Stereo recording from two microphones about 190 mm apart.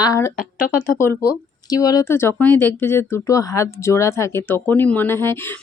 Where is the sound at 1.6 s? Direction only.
20° left (ahead or behind).